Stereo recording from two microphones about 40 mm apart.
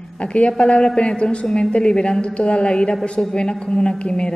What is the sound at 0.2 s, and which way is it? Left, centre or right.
A woman's voice, left.